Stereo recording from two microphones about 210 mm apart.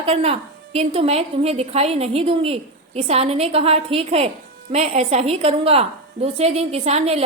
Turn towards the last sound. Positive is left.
turn(degrees=-30)  # may be behind; listen again after turning